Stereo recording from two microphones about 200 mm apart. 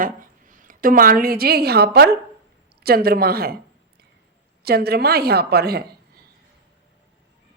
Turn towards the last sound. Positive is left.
turn(degrees=-50)  # may be behind; listen again after turning